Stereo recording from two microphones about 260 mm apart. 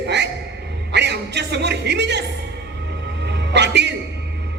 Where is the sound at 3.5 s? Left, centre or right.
Right.